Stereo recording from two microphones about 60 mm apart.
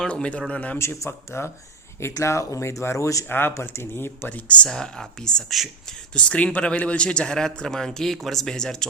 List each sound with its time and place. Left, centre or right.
0.0 s speech: centre
0.8 s speech: left
2.2 s speech: left
3.2 s speech: left
4.6 s speech: centre